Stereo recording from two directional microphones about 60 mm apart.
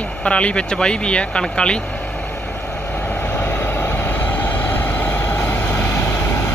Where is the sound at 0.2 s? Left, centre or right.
Centre.